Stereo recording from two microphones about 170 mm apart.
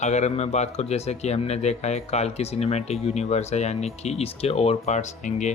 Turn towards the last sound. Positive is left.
turn(degrees=45)  # may be behind; listen again after turning